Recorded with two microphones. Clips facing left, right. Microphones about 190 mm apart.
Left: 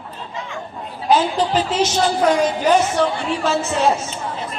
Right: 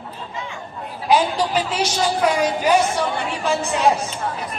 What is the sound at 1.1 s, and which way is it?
A woman's voice, 10° right (ahead or behind).